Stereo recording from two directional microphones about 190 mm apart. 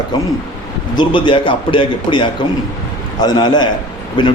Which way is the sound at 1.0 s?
25° left (ahead or behind).